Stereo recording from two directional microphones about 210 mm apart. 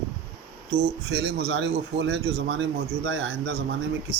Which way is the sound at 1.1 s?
50° right (ahead or behind).